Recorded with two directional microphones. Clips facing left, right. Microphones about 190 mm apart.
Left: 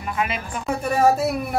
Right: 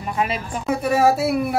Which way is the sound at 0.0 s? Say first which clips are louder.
Right 2 dB; 35° right (ahead or behind).